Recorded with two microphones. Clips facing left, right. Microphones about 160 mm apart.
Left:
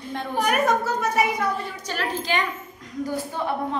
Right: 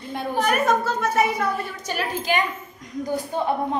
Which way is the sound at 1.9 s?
10° right (ahead or behind).